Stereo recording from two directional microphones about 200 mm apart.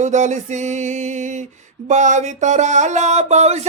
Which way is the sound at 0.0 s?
35° right (ahead or behind).